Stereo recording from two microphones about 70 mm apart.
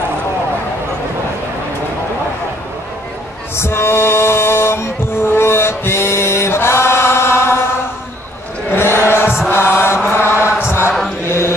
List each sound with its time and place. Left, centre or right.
3.5 s music: left
8.6 s chant: left
9.5 s mantra: left
10.0 s chant: left
11.2 s mantra: left